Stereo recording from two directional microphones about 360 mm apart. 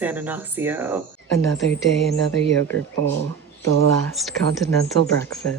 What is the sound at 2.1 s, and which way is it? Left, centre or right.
Speech, left.